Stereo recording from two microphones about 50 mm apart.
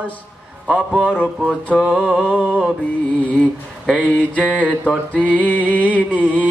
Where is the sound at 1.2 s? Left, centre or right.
Right.